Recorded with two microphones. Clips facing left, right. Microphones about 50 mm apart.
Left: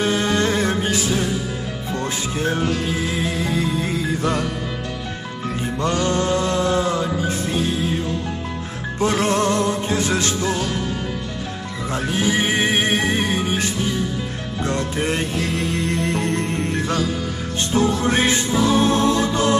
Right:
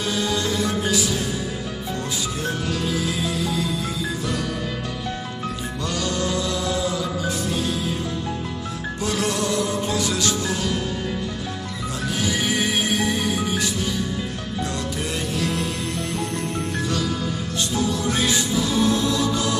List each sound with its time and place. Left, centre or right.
0.0 s music: left
5.6 s music: left
9.0 s music: left
11.9 s music: left